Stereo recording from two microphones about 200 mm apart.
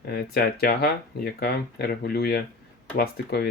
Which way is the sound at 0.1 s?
50° left (ahead or behind).